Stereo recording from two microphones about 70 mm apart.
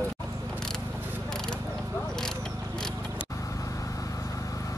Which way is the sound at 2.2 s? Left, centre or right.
Centre.